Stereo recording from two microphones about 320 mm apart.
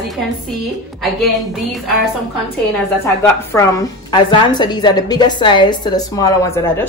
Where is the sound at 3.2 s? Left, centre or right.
Centre.